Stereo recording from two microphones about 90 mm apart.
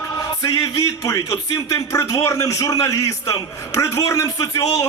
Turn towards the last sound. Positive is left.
turn(degrees=40)  # may be behind; listen again after turning